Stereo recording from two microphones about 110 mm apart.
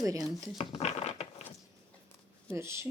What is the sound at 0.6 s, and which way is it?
Speech, 70° left (ahead or behind).